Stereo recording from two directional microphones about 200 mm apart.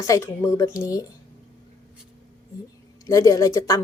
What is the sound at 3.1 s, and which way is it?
Speech, 15° left (ahead or behind).